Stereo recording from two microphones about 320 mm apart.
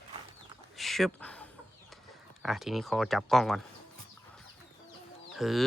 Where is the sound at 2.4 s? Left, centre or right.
Centre.